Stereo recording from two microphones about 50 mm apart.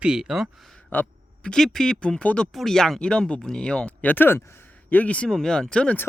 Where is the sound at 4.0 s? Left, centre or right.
Left.